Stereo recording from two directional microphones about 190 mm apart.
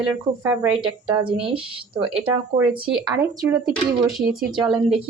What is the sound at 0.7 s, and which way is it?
Speech, 25° right (ahead or behind).